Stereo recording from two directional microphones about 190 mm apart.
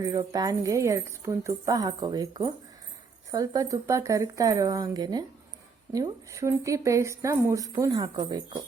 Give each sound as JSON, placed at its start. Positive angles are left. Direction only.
{"t": 0.0, "sound": "a woman's voice", "side_deg": -20}